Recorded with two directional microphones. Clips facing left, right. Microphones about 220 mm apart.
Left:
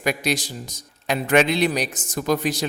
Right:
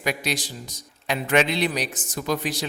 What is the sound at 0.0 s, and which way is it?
A man's voice, 45° left (ahead or behind).